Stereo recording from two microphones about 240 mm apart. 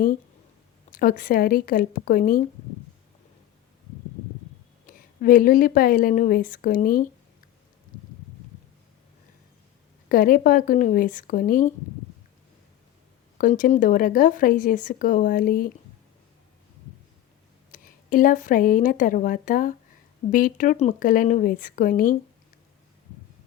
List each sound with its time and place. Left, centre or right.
0.9 s a woman's voice: left
4.9 s a woman's voice: left
10.1 s a woman's voice: left
13.4 s a woman's voice: left
17.7 s a woman's voice: left